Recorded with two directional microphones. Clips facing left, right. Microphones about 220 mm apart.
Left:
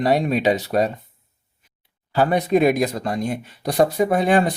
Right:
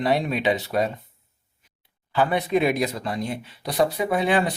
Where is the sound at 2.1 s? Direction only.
40° left (ahead or behind).